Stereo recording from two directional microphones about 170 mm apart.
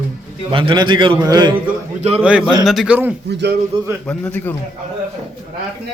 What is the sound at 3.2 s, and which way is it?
Speech, 80° right.